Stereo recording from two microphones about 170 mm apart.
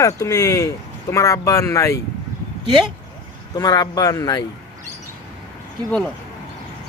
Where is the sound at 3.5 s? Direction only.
20° left (ahead or behind).